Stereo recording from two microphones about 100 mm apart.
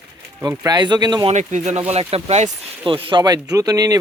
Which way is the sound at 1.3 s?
90° right.